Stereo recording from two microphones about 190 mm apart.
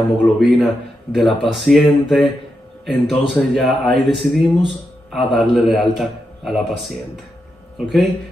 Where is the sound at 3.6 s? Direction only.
Centre (ahead or behind).